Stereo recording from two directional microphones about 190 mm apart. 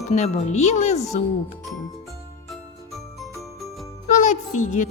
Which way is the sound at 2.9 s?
Centre (ahead or behind).